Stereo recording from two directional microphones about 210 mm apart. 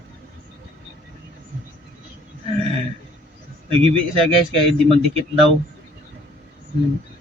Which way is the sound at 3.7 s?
25° right (ahead or behind).